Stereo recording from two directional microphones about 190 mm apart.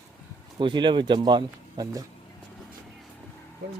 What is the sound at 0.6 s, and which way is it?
Speech, 25° right (ahead or behind).